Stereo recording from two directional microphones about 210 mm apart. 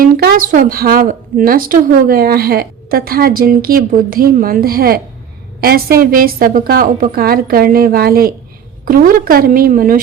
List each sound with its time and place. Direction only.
0.0 s speech: 45° right (ahead or behind)